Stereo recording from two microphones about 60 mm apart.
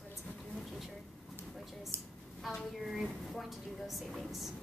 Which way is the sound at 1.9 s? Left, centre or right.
Right.